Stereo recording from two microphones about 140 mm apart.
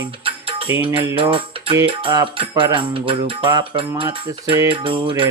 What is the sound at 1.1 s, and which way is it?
Music, 40° right (ahead or behind).